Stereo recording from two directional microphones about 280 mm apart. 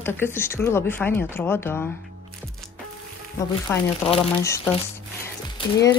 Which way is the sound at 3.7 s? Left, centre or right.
Centre.